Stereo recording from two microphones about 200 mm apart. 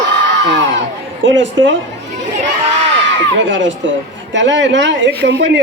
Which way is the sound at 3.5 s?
65° right (ahead or behind).